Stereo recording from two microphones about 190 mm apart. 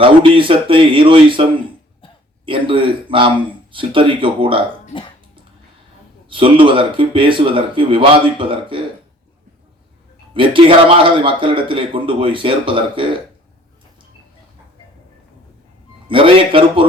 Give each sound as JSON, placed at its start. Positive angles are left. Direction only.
{"t": 0.0, "sound": "a man's voice", "side_deg": -25}
{"t": 2.5, "sound": "a man's voice", "side_deg": -25}
{"t": 6.3, "sound": "a man's voice", "side_deg": -25}
{"t": 10.3, "sound": "a man's voice", "side_deg": -25}
{"t": 16.0, "sound": "a man's voice", "side_deg": -25}